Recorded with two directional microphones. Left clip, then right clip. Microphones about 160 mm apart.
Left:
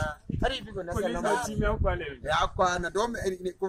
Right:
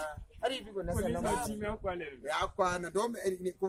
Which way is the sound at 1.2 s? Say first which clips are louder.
Left 8 dB; centre (ahead or behind).